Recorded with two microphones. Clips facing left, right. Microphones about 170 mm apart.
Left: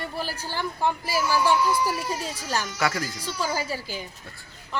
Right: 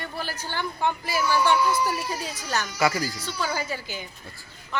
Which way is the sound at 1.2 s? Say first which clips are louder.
Even; 5° left (ahead or behind).